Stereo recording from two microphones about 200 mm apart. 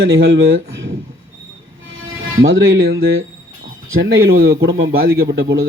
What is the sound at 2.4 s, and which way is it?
Speech, 85° right.